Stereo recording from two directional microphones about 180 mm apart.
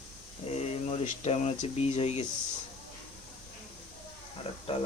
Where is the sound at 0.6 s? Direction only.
35° left (ahead or behind).